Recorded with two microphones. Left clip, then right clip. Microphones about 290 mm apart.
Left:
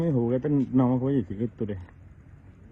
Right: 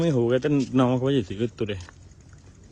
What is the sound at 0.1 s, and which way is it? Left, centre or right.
Speech, left.